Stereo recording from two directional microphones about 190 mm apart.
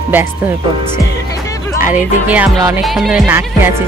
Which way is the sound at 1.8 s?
10° right (ahead or behind).